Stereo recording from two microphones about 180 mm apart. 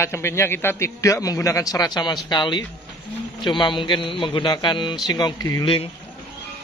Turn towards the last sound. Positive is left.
turn(degrees=30)  # may be behind; listen again after turning